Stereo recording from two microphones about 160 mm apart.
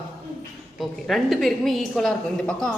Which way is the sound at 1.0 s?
Centre (ahead or behind).